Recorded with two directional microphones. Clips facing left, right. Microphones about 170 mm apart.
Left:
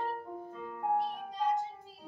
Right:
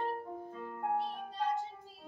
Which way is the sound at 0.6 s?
Centre (ahead or behind).